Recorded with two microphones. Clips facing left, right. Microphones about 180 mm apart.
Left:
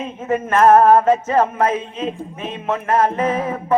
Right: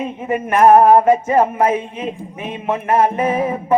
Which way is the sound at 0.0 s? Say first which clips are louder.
Right 1 dB; 15° right (ahead or behind).